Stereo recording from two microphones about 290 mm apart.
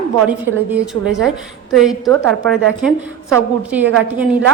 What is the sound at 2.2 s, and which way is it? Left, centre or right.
Speech, right.